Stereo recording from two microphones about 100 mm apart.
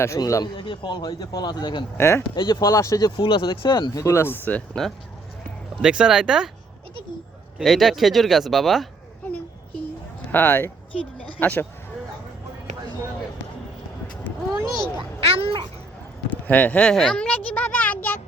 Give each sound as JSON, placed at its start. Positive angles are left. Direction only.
{"t": 0.2, "sound": "speech", "side_deg": 35}
{"t": 0.5, "sound": "a man's voice", "side_deg": 55}
{"t": 2.0, "sound": "speech", "side_deg": 25}
{"t": 2.3, "sound": "speech", "side_deg": 50}
{"t": 3.2, "sound": "a man's voice", "side_deg": 55}
{"t": 3.9, "sound": "speech", "side_deg": 30}
{"t": 5.8, "sound": "speech", "side_deg": -5}
{"t": 7.6, "sound": "speech", "side_deg": 0}
{"t": 10.3, "sound": "speech", "side_deg": 20}
{"t": 14.7, "sound": "speech", "side_deg": 5}
{"t": 15.2, "sound": "a sound", "side_deg": -80}
{"t": 16.3, "sound": "a sound", "side_deg": 15}